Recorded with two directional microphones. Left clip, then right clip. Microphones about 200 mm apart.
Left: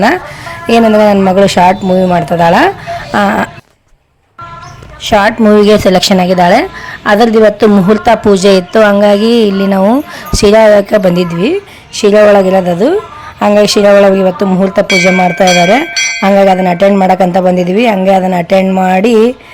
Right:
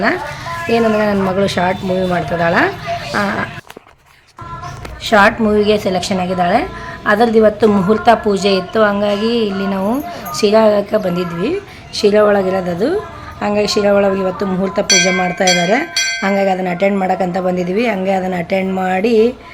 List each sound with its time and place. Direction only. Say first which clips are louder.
0.0 s speech: left 6 dB; 40° left (ahead or behind)
5.0 s speech: left 4 dB; 30° left (ahead or behind)